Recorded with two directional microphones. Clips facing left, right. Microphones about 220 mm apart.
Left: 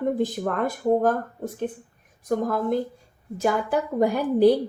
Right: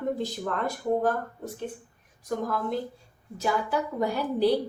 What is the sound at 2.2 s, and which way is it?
A woman's voice, 50° left (ahead or behind).